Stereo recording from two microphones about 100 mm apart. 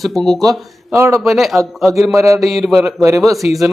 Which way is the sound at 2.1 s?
30° right (ahead or behind).